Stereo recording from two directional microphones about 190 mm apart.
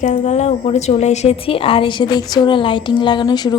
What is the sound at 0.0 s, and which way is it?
A woman's voice, 35° left (ahead or behind).